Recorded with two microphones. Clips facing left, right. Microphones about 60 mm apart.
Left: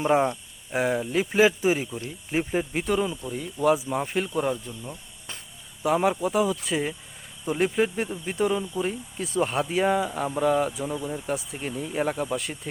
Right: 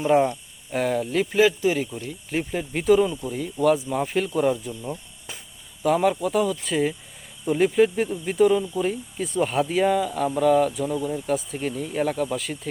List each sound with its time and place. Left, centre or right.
0.1 s speech: centre
1.4 s speech: left
2.7 s speech: centre
3.6 s speech: centre
4.8 s snake: centre
5.8 s speech: centre
9.9 s speech: centre